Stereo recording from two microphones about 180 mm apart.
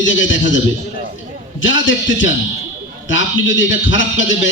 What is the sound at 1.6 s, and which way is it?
A man's voice, 90° left.